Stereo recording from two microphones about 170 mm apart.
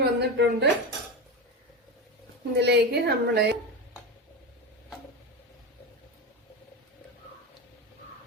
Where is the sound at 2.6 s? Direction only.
75° right (ahead or behind).